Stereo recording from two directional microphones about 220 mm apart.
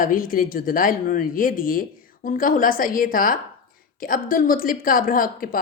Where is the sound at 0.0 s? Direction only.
40° left (ahead or behind).